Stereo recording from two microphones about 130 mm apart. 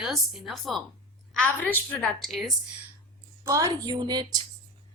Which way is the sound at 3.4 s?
25° right (ahead or behind).